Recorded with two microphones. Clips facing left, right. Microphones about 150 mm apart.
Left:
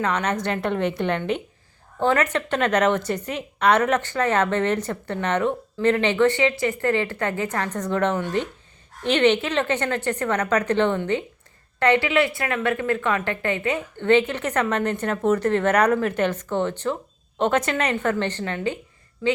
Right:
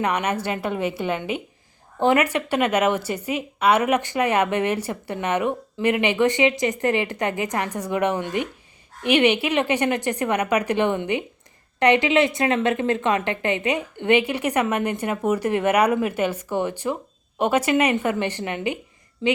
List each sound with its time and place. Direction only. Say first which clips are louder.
0.0 s a woman's voice: even; 10° right (ahead or behind)